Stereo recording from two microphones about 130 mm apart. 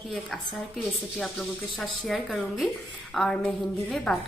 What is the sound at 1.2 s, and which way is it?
Speech, 5° left (ahead or behind).